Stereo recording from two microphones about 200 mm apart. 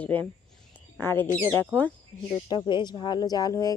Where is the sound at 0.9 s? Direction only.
10° left (ahead or behind).